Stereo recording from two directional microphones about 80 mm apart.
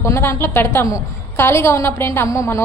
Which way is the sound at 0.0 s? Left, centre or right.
Left.